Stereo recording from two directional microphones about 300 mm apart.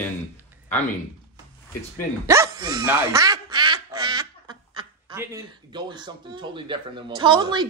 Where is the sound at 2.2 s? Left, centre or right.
Centre.